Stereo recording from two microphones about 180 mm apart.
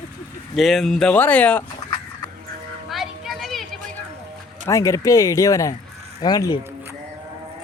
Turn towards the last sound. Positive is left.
turn(degrees=20)  # may be behind; listen again after turning